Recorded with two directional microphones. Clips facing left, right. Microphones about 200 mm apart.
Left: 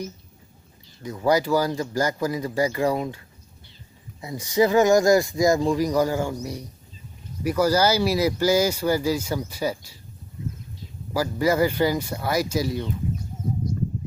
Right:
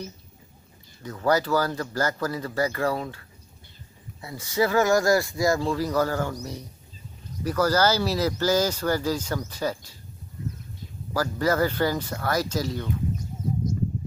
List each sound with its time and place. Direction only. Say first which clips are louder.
1.0 s speech: left 2 dB; 15° left (ahead or behind)
4.2 s speech: left 4 dB; 20° left (ahead or behind)
11.1 s speech: left 2 dB; 10° left (ahead or behind)